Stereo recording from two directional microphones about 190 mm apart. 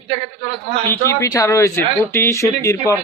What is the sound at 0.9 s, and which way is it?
Speech, 15° left (ahead or behind).